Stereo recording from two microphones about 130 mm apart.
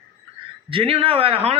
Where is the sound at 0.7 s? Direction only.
45° right (ahead or behind).